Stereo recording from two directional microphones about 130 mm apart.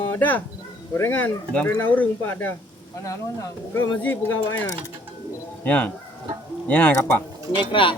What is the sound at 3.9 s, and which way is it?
Speech, 10° left (ahead or behind).